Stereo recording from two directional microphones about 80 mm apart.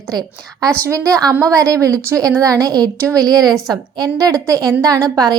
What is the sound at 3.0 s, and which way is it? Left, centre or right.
A woman's voice, right.